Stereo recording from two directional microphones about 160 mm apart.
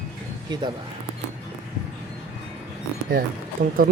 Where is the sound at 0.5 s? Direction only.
30° right (ahead or behind).